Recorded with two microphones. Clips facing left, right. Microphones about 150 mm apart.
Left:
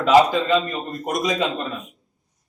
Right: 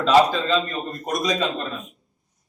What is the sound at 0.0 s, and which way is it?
A man's voice, 15° left (ahead or behind).